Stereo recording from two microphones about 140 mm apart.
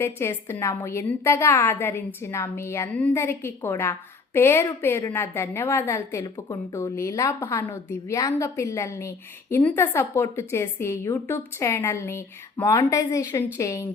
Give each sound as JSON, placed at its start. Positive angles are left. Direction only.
{"t": 0.0, "sound": "a woman's voice", "side_deg": 20}